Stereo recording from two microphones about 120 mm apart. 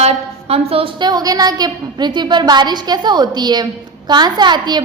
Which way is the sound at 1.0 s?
35° right (ahead or behind).